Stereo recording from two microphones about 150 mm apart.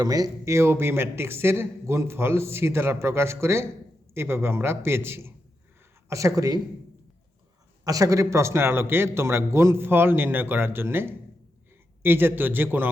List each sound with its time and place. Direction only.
0.0 s a man's voice: 25° right (ahead or behind)
7.9 s a man's voice: 20° right (ahead or behind)